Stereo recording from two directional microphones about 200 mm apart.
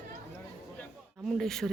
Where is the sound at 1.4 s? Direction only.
Centre (ahead or behind).